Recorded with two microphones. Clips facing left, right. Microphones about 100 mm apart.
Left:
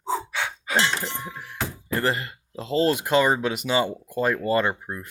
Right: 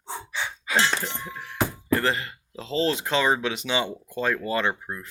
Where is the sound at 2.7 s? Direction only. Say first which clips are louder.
Left 3 dB; 45° left (ahead or behind).